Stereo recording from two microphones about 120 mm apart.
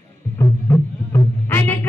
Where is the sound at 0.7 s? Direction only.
15° left (ahead or behind).